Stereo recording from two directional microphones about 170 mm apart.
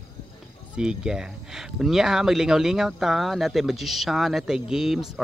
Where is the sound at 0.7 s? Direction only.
5° right (ahead or behind).